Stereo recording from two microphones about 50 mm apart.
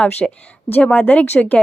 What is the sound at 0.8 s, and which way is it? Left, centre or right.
Speech, left.